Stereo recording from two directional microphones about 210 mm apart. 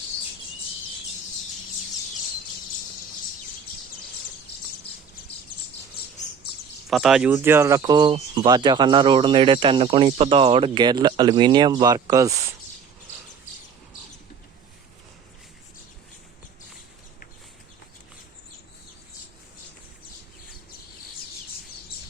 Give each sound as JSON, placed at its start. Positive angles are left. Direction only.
{"t": 6.9, "sound": "speech", "side_deg": 0}